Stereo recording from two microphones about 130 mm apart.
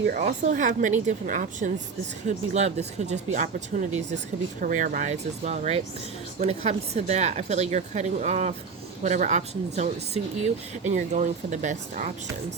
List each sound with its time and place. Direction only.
0.1 s a woman's voice: 85° right
2.2 s speech: 60° right (ahead or behind); by 3.8 s 80° right
4.6 s a woman's voice: 90° right